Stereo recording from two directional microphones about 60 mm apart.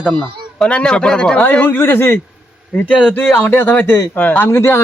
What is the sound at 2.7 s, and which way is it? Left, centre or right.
A man's voice, left.